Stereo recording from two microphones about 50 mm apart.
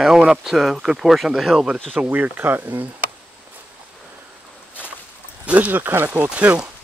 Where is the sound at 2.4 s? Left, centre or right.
Right.